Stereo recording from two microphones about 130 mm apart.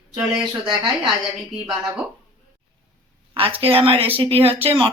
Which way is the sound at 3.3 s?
45° right (ahead or behind).